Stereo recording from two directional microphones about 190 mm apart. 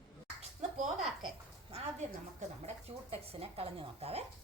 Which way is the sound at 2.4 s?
35° right (ahead or behind).